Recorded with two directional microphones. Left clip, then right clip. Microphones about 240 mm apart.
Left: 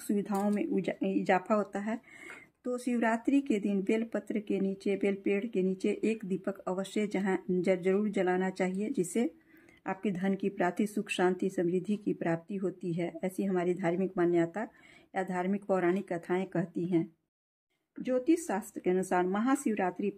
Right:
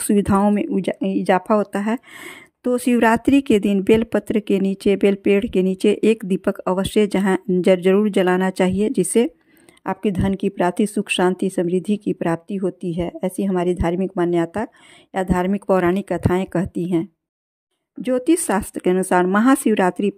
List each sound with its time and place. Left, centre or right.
0.0 s speech: right